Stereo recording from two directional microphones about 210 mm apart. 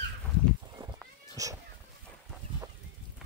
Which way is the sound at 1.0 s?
15° right (ahead or behind).